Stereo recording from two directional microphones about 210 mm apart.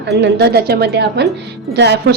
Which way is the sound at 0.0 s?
55° right (ahead or behind).